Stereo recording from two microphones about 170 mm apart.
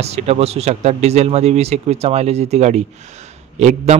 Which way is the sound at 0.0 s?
40° right (ahead or behind).